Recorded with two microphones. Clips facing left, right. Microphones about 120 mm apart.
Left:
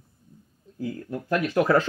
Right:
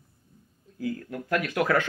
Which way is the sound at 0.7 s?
25° left (ahead or behind).